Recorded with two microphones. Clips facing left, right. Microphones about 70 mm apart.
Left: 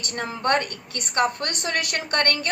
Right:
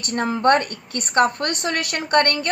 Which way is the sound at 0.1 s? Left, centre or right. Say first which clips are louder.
Right 6 dB; right.